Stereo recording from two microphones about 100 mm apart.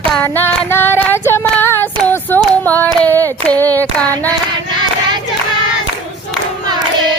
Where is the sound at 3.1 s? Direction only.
20° left (ahead or behind).